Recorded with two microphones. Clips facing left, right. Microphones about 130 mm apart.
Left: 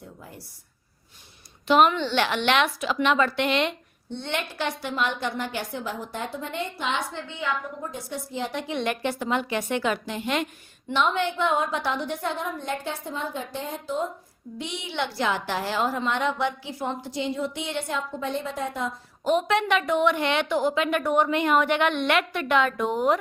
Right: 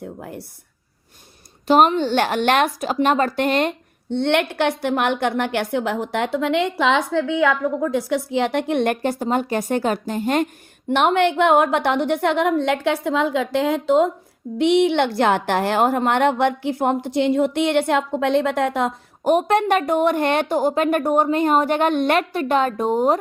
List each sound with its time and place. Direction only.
0.0 s a sound: 60° right (ahead or behind)
1.6 s speech: 40° right (ahead or behind)
4.1 s a woman's voice: 65° right (ahead or behind); by 10.9 s 45° right (ahead or behind)
10.9 s a woman's voice: 65° right (ahead or behind); by 14.1 s 80° right
14.6 s a woman's voice: 65° right (ahead or behind); by 23.2 s 35° right (ahead or behind)